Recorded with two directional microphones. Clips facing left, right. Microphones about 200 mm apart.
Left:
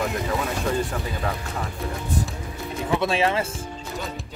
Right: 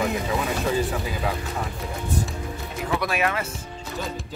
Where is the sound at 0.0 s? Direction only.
5° right (ahead or behind).